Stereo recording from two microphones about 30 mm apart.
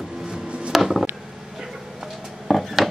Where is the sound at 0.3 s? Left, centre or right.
Right.